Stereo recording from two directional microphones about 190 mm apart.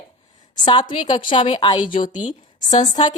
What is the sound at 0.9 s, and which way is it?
Speech, 25° left (ahead or behind).